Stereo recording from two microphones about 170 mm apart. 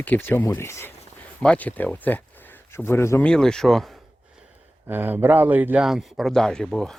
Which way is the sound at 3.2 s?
5° left (ahead or behind).